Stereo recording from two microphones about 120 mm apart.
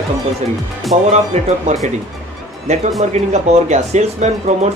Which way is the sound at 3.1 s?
70° right (ahead or behind).